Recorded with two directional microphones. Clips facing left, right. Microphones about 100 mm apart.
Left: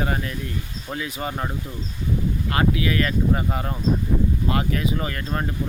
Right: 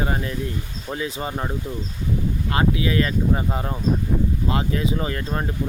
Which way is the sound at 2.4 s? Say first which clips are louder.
Right 1 dB; 25° right (ahead or behind).